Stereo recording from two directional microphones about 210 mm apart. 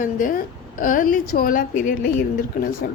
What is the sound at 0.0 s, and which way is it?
A woman's voice, 40° left (ahead or behind).